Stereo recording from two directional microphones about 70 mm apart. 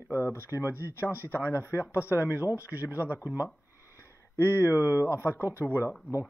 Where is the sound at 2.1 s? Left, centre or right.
Right.